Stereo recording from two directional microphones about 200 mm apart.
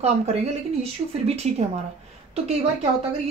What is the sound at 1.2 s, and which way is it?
Speech, 30° right (ahead or behind).